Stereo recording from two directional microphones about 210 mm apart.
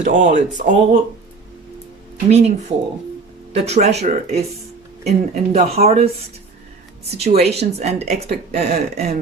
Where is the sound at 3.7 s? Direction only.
30° right (ahead or behind).